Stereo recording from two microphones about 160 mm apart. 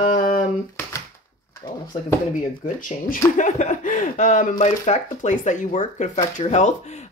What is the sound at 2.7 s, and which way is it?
Speech, 60° left (ahead or behind).